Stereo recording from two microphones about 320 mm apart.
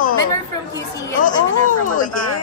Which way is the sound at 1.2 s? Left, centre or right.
Left.